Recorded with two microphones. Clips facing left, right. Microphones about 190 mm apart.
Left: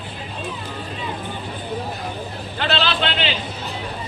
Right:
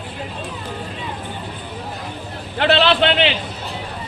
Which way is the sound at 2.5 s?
65° right (ahead or behind).